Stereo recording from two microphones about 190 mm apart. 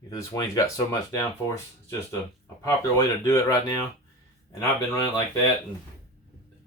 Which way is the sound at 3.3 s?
20° left (ahead or behind).